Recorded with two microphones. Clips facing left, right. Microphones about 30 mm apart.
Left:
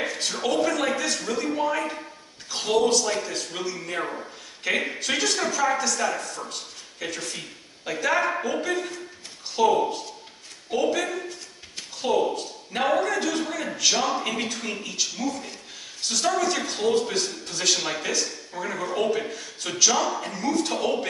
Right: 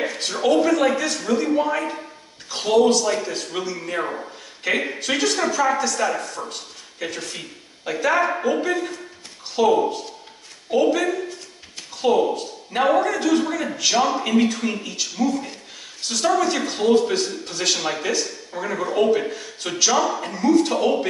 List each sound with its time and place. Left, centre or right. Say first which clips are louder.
0.0 s a man's voice: right 5 dB; centre